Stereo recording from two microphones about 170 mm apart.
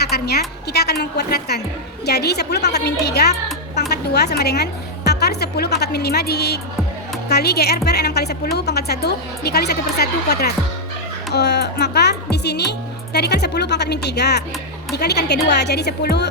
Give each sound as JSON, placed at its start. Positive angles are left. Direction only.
{"t": 0.0, "sound": "a woman's voice", "side_deg": 70}
{"t": 11.3, "sound": "speech", "side_deg": 80}